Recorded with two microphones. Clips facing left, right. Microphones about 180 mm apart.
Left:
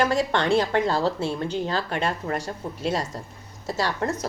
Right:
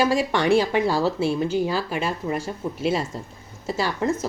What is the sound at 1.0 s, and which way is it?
Speech, 25° left (ahead or behind).